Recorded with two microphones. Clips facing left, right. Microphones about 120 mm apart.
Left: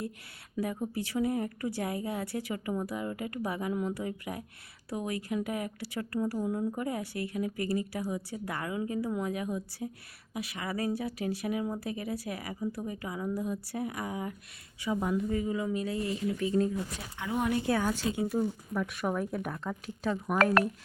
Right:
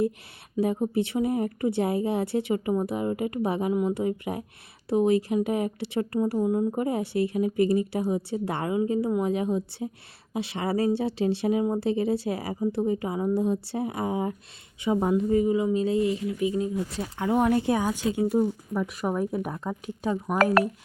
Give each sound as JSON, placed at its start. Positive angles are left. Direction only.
{"t": 0.5, "sound": "speech", "side_deg": -20}
{"t": 17.7, "sound": "speech", "side_deg": -15}